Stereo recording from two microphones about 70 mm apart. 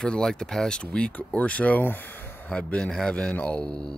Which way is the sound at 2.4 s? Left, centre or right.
Centre.